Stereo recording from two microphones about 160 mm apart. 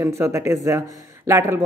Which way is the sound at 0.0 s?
15° right (ahead or behind).